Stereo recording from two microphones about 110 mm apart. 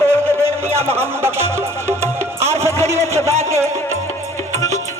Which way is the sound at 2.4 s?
25° right (ahead or behind).